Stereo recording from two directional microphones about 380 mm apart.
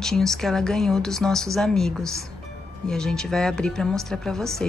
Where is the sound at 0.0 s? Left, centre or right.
Centre.